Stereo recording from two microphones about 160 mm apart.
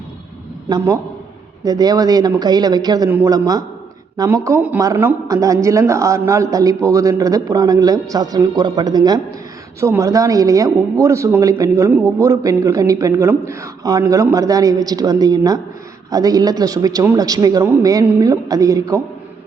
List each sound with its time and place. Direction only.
1.6 s a woman's voice: 25° right (ahead or behind)